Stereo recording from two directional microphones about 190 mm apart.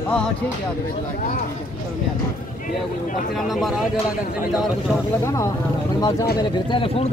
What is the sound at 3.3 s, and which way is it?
Speech, centre (ahead or behind).